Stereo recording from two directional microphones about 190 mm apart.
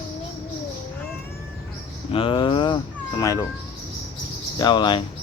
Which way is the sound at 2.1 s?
25° left (ahead or behind).